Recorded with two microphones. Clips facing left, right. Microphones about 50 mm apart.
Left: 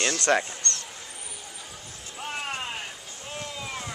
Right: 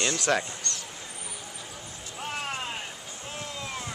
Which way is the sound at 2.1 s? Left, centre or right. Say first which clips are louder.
Left 1 dB; centre.